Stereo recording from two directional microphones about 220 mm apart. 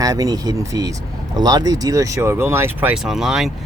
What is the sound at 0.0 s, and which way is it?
Speech, 15° right (ahead or behind).